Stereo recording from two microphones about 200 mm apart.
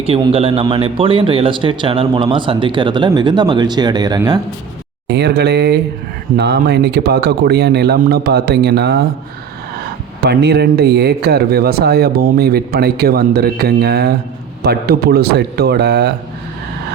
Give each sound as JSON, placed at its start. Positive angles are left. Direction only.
{"t": 0.0, "sound": "speech", "side_deg": -30}
{"t": 5.0, "sound": "speech", "side_deg": -55}
{"t": 10.2, "sound": "speech", "side_deg": -55}